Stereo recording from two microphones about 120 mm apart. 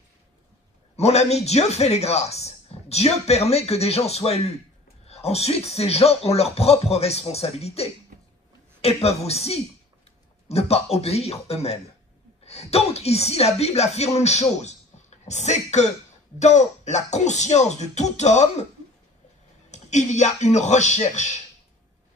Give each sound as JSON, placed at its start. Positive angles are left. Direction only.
{"t": 0.9, "sound": "speech", "side_deg": 65}
{"t": 19.7, "sound": "speech", "side_deg": 75}